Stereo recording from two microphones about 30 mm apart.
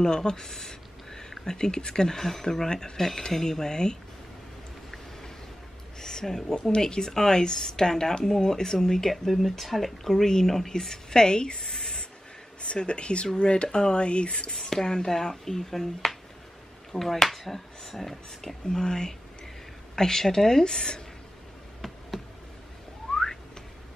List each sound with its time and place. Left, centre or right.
0.0 s speech: left
5.9 s speech: centre
8.7 s speech: centre
9.3 s speech: centre; by 12.0 s left
12.8 s speech: left
14.5 s speech: centre
16.9 s speech: centre
18.7 s speech: left
23.0 s a sound: centre